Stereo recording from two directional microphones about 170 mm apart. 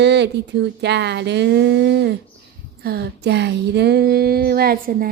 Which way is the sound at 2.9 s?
70° right (ahead or behind).